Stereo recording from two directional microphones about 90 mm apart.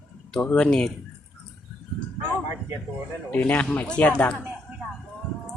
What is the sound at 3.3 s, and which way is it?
Speech, 15° left (ahead or behind).